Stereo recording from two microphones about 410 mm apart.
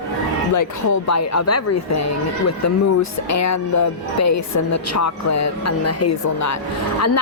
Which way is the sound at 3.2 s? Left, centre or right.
Left.